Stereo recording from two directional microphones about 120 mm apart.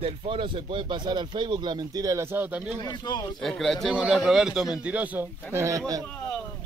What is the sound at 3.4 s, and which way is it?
A man's voice, centre (ahead or behind).